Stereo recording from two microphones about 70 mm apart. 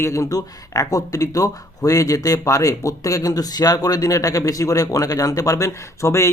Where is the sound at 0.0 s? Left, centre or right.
Left.